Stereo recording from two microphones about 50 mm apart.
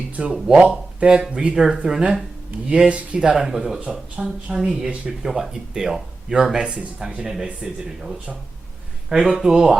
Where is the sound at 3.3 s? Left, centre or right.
Centre.